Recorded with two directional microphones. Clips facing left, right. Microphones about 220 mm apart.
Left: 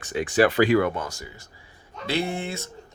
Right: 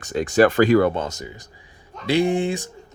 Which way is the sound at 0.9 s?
25° right (ahead or behind).